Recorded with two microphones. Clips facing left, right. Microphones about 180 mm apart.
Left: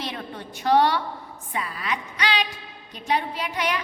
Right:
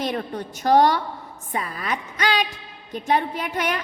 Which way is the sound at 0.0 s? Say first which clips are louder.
Right 7 dB; 45° right (ahead or behind).